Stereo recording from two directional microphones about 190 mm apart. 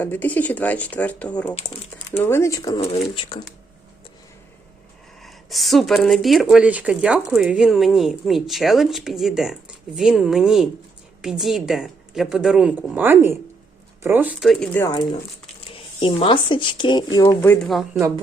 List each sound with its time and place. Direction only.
0.0 s speech: 10° left (ahead or behind); by 3.4 s 30° left (ahead or behind)
5.2 s speech: centre (ahead or behind)
16.0 s speech: 30° left (ahead or behind); by 18.0 s centre (ahead or behind)